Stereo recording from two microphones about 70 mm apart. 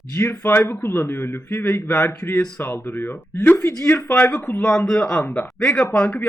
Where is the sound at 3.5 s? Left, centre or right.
Left.